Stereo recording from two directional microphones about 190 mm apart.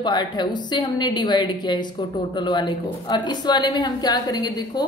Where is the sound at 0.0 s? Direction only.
25° left (ahead or behind).